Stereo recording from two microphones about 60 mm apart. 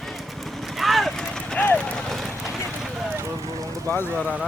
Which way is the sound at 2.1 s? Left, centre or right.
Centre.